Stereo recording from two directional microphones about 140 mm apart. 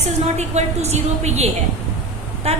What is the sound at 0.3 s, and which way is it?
A woman's voice, 50° right (ahead or behind).